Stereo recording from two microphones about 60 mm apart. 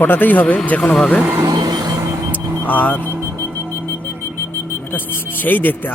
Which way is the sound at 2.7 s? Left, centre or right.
Left.